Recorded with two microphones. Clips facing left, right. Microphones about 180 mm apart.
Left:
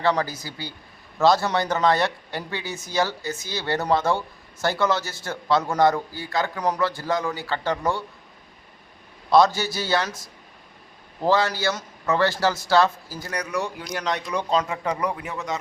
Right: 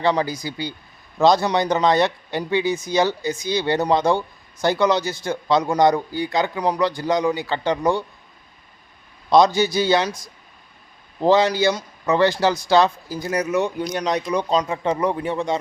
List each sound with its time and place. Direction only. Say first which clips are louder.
0.0 s a man's voice: right 3 dB; 15° right (ahead or behind)
9.3 s a man's voice: right 3 dB; 20° right (ahead or behind)
11.2 s a man's voice: right 5 dB; 20° right (ahead or behind)